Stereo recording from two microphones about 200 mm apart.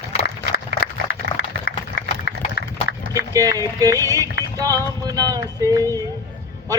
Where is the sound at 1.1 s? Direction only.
55° left (ahead or behind).